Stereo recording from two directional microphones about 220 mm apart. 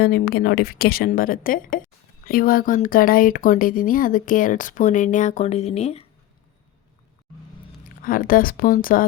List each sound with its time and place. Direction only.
0.0 s a woman's voice: 45° left (ahead or behind); by 6.1 s 30° left (ahead or behind)
7.9 s speech: 40° left (ahead or behind)